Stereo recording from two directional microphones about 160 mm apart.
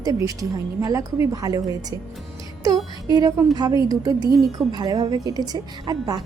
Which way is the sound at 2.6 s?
20° right (ahead or behind).